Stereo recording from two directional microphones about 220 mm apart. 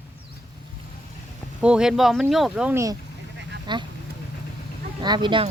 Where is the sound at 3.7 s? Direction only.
20° right (ahead or behind).